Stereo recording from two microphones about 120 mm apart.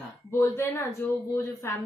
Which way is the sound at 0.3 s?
20° left (ahead or behind).